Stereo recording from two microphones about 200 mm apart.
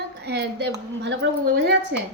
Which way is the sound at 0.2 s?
55° right (ahead or behind).